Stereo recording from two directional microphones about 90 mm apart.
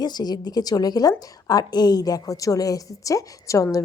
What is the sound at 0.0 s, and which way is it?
A woman's voice, 50° left (ahead or behind).